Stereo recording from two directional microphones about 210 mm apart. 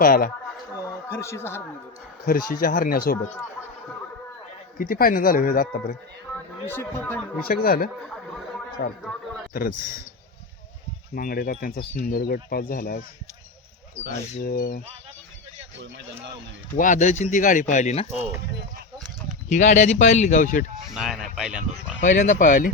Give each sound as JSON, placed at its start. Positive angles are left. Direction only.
{"t": 0.0, "sound": "speech", "side_deg": 45}
{"t": 0.8, "sound": "a sound", "side_deg": 15}
{"t": 2.2, "sound": "speech", "side_deg": 45}
{"t": 4.8, "sound": "speech", "side_deg": 45}
{"t": 6.3, "sound": "speech", "side_deg": 10}
{"t": 7.4, "sound": "speech", "side_deg": 45}
{"t": 8.8, "sound": "a man's voice", "side_deg": 60}
{"t": 9.5, "sound": "speech", "side_deg": 40}
{"t": 11.1, "sound": "speech", "side_deg": 45}
{"t": 14.4, "sound": "speech", "side_deg": 45}
{"t": 16.7, "sound": "speech", "side_deg": 35}
{"t": 19.5, "sound": "speech", "side_deg": 35}
{"t": 20.9, "sound": "speech", "side_deg": 0}
{"t": 22.0, "sound": "speech", "side_deg": 35}